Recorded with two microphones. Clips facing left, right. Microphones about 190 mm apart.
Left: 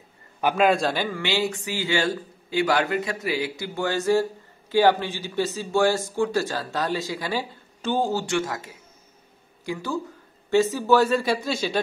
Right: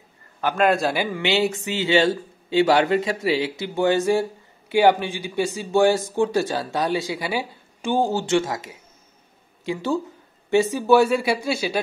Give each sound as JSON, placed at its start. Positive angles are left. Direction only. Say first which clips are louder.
{"t": 0.6, "sound": "a man's voice", "louder": "right 2 dB", "side_deg": 0}
{"t": 1.1, "sound": "speech", "louder": "right 4 dB", "side_deg": -20}